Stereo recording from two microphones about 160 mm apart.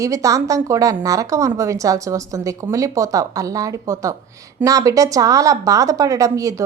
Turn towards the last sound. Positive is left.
turn(degrees=-20)  # may be behind; listen again after turning